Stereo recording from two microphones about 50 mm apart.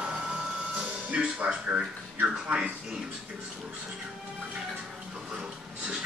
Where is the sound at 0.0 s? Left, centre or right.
Centre.